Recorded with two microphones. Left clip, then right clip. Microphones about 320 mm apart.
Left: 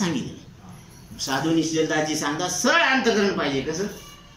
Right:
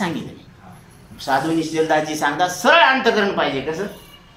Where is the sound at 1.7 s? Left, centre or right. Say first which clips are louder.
Right 4 dB; centre.